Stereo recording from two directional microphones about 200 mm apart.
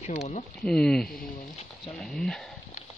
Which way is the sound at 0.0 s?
35° left (ahead or behind).